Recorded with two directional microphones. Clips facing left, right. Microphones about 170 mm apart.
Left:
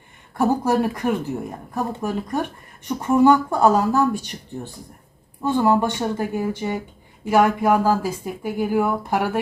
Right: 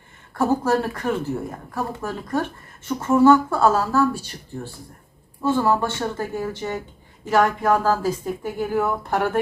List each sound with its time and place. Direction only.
0.3 s speech: 15° left (ahead or behind)